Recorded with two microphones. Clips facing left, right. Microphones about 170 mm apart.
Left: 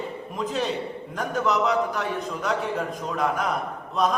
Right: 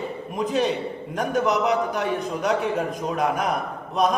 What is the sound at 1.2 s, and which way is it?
Speech, 15° right (ahead or behind).